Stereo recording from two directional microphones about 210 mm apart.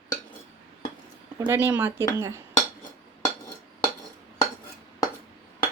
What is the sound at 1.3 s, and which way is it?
Speech, 10° right (ahead or behind).